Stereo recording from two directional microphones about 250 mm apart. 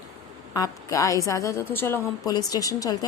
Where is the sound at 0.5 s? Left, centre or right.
Centre.